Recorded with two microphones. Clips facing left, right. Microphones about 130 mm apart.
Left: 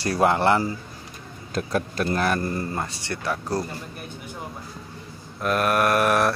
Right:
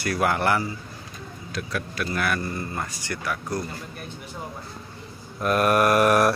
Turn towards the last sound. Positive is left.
turn(degrees=0)  # may be behind; listen again after turning